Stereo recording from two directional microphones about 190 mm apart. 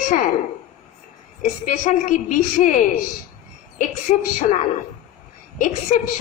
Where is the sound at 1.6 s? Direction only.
40° left (ahead or behind).